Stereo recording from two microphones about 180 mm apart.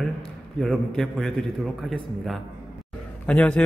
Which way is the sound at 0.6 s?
Centre (ahead or behind).